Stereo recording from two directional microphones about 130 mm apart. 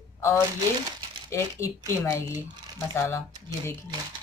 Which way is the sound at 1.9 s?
20° left (ahead or behind).